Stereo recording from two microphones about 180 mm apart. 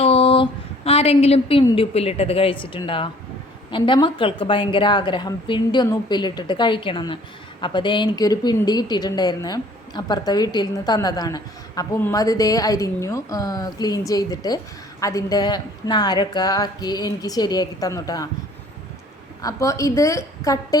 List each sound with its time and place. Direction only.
0.0 s a sound: 30° left (ahead or behind)
0.9 s a woman's voice: 35° left (ahead or behind)
19.4 s a woman's voice: 20° left (ahead or behind)